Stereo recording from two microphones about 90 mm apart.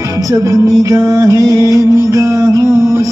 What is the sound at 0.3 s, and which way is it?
Music, 35° right (ahead or behind).